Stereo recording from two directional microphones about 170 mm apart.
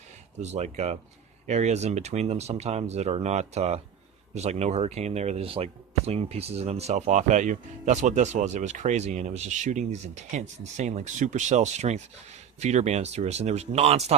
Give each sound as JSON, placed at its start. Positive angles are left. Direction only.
{"t": 0.3, "sound": "speech", "side_deg": -40}